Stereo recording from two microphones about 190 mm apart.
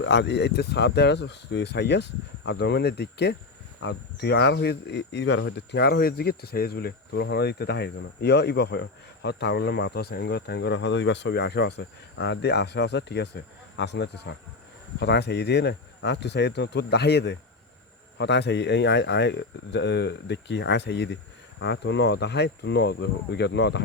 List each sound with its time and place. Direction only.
0.0 s speech: 70° left (ahead or behind)